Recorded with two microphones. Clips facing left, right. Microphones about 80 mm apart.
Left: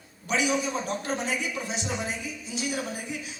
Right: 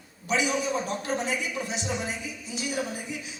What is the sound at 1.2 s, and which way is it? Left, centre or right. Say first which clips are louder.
Speech: even; left.